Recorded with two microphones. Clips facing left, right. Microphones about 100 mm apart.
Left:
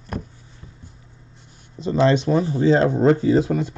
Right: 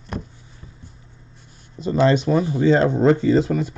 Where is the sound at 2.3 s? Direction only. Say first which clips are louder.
Even; 35° left (ahead or behind).